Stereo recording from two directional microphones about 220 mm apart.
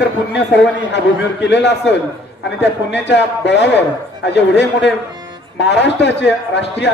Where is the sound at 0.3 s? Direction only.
50° left (ahead or behind).